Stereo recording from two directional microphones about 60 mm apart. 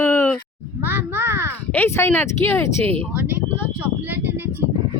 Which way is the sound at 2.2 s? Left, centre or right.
Left.